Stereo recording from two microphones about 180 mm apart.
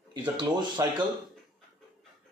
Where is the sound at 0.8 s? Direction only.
15° right (ahead or behind).